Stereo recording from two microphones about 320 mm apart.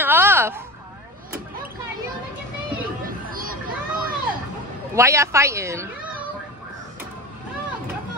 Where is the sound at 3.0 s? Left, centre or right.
Right.